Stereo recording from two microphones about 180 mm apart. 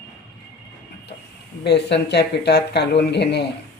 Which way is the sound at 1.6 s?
70° left (ahead or behind).